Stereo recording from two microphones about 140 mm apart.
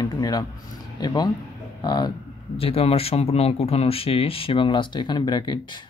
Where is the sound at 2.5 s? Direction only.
45° left (ahead or behind).